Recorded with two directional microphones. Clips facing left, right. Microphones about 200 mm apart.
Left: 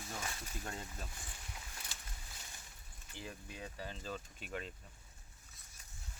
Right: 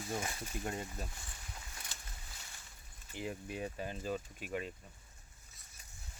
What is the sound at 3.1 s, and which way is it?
Speech, 15° right (ahead or behind).